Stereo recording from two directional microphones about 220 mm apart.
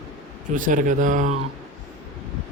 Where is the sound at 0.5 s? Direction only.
35° right (ahead or behind).